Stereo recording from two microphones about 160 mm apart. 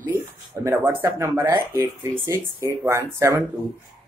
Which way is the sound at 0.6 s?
15° right (ahead or behind).